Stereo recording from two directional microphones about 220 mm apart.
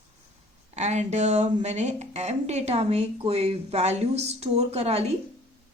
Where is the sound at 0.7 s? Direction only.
30° right (ahead or behind).